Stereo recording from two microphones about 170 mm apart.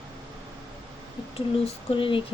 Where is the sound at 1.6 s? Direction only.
30° left (ahead or behind).